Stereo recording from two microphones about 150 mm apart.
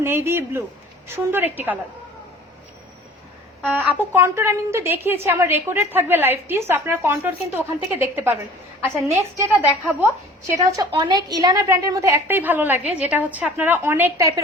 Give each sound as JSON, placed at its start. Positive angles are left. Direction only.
{"t": 0.0, "sound": "a woman's voice", "side_deg": -15}
{"t": 3.7, "sound": "a woman's voice", "side_deg": -10}